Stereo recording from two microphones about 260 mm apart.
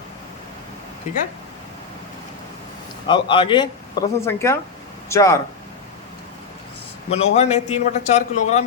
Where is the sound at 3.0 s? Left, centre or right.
Centre.